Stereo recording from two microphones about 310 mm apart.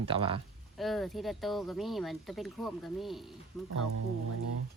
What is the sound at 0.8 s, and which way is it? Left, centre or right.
Speech, centre.